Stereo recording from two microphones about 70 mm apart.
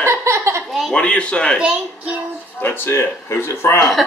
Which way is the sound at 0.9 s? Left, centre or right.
Centre.